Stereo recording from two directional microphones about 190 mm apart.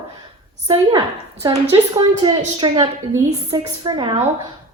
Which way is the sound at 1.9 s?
25° right (ahead or behind).